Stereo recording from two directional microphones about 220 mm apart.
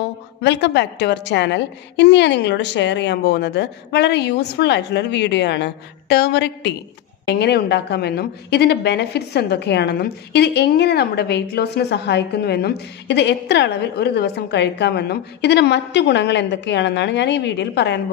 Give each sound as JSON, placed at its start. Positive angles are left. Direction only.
{"t": 0.4, "sound": "a woman's voice", "side_deg": 50}